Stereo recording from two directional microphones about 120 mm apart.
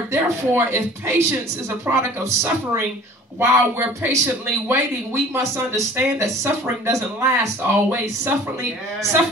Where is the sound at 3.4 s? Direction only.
20° right (ahead or behind).